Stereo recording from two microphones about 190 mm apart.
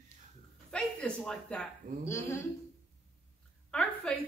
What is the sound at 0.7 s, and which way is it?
Speech, 5° left (ahead or behind).